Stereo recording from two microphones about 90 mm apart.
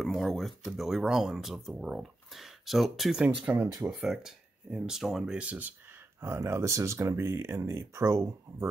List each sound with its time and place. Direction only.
0.0 s speech: centre (ahead or behind)
3.5 s speech: 20° right (ahead or behind)
3.9 s speech: 5° right (ahead or behind)
6.2 s speech: 30° right (ahead or behind)